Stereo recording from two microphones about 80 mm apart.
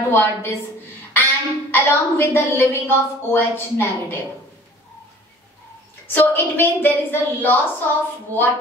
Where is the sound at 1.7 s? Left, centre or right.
Left.